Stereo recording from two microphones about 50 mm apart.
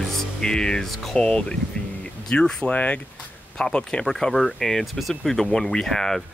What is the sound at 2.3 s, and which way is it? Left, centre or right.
Speech, left.